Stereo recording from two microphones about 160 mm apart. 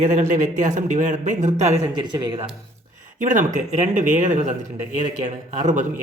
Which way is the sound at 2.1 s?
30° right (ahead or behind).